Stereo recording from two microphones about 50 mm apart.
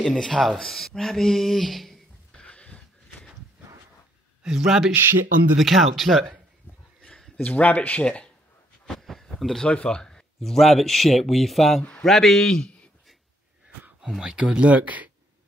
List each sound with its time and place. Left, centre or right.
0.0 s speech: centre
2.3 s a sound: left
4.4 s speech: centre
7.2 s a sound: centre
7.4 s speech: left
8.0 s speech: centre
8.8 s a sound: centre
9.8 s speech: centre
11.8 s speech: centre
12.1 s speech: centre
12.5 s speech: centre
14.2 s speech: right